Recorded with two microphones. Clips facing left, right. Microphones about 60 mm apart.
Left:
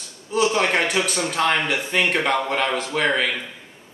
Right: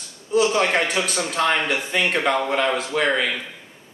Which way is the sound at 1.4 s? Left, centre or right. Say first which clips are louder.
Even; centre.